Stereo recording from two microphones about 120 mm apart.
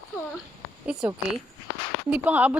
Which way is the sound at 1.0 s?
10° right (ahead or behind).